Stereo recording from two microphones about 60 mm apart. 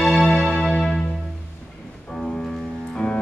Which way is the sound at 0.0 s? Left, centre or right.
Centre.